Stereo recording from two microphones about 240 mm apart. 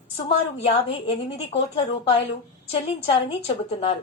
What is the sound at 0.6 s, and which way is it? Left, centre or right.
A woman's voice, left.